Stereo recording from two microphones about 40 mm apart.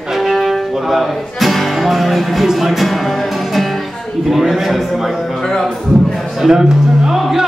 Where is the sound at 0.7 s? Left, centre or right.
Centre.